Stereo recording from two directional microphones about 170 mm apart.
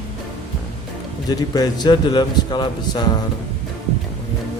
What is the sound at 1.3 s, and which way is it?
Speech, 20° left (ahead or behind).